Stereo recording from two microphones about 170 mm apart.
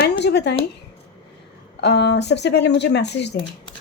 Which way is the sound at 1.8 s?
80° left.